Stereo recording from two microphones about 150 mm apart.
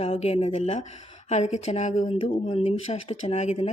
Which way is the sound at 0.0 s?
40° left (ahead or behind).